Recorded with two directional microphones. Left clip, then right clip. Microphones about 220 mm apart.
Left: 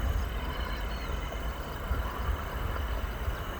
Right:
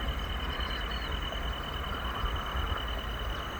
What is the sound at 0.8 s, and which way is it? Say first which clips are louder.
Vehicle: right 3 dB; 15° left (ahead or behind).